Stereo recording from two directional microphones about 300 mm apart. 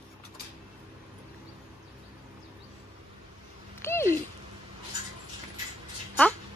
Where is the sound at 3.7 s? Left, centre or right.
Centre.